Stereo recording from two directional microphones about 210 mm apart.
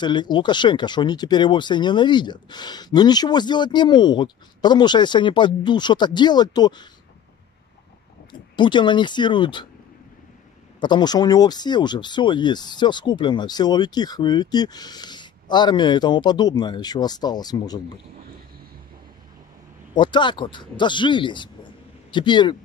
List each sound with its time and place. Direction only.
0.0 s speech: 20° left (ahead or behind)
8.3 s speech: 20° left (ahead or behind)
10.8 s speech: 20° left (ahead or behind)
19.9 s speech: 20° left (ahead or behind)